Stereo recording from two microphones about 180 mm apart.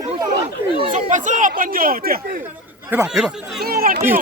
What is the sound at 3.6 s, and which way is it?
Speech, 55° right (ahead or behind).